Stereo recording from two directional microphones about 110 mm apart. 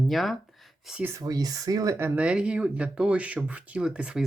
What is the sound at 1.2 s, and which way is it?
Speech, 35° right (ahead or behind).